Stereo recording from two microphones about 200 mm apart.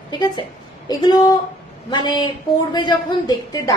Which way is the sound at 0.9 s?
20° left (ahead or behind).